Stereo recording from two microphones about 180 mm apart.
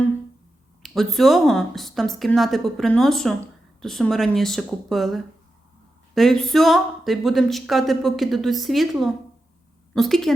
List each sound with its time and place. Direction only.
0.8 s speech: centre (ahead or behind)